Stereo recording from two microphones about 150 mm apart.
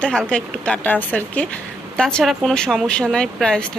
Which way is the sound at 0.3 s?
5° left (ahead or behind).